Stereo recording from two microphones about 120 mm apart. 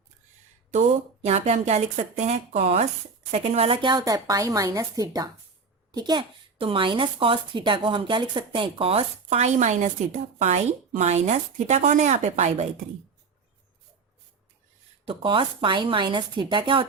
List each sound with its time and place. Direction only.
0.7 s speech: 70° right (ahead or behind)
2.5 s a woman's voice: 55° right (ahead or behind)
3.8 s a woman's voice: 40° right (ahead or behind); by 12.6 s 70° right (ahead or behind)
15.0 s a woman's voice: 45° right (ahead or behind)